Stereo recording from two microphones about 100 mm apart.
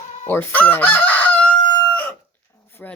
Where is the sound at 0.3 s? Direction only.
20° left (ahead or behind).